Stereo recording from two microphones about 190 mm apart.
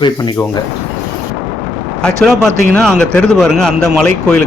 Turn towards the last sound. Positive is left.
turn(degrees=5)  # may be behind; listen again after turning